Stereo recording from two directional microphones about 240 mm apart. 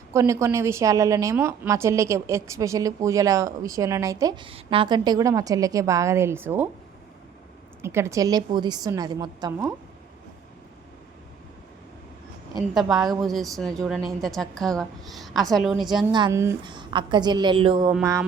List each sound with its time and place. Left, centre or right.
0.1 s a woman's voice: centre
7.8 s a woman's voice: centre
12.5 s a woman's voice: centre
16.1 s a woman's voice: centre